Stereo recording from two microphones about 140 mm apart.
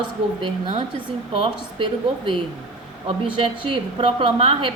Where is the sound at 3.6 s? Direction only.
40° right (ahead or behind).